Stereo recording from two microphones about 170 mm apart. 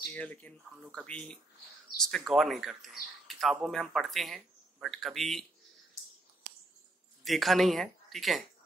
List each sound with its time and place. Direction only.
0.0 s speech: 10° left (ahead or behind)
7.2 s speech: centre (ahead or behind)